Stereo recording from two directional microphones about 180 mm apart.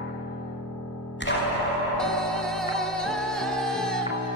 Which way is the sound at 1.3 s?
90° left.